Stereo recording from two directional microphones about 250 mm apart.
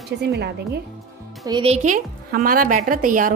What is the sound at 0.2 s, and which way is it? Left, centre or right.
Speech, right.